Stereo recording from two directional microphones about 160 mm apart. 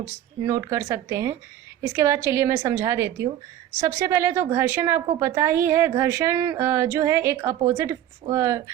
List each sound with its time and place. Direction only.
0.4 s a woman's voice: 20° right (ahead or behind)